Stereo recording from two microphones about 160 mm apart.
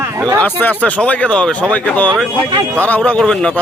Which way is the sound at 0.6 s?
10° left (ahead or behind).